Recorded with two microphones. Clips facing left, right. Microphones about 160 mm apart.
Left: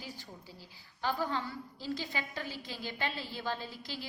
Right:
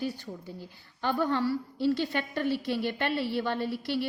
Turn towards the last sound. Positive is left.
turn(degrees=-65)  # may be behind; listen again after turning